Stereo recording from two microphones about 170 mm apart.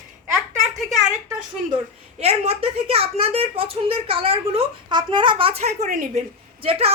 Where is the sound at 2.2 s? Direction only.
35° right (ahead or behind).